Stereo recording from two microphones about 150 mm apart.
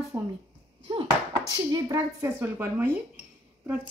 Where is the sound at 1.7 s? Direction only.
25° right (ahead or behind).